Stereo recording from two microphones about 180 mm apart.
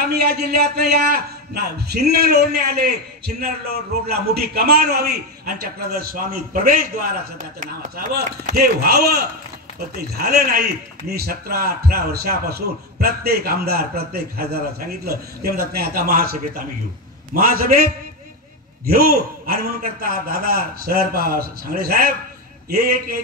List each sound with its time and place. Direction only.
0.1 s a man's voice: 65° right (ahead or behind)
4.1 s a man's voice: 60° right (ahead or behind)
8.1 s a man's voice: 60° right (ahead or behind)
18.9 s a man's voice: 55° right (ahead or behind)